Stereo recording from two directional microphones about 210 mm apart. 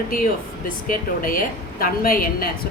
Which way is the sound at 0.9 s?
40° left (ahead or behind).